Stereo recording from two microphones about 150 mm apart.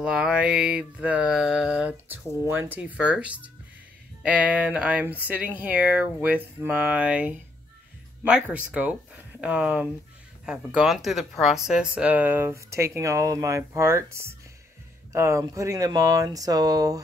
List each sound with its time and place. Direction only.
0.0 s speech: 5° right (ahead or behind); by 17.0 s 25° right (ahead or behind)